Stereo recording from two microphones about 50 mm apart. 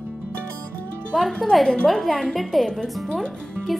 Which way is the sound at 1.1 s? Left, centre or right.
Centre.